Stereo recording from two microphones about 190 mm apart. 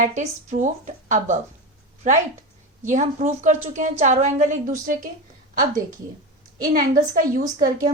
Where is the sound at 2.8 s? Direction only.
40° right (ahead or behind).